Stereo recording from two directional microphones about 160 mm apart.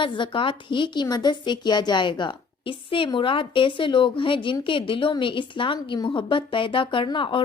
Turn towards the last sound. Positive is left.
turn(degrees=30)  # may be behind; listen again after turning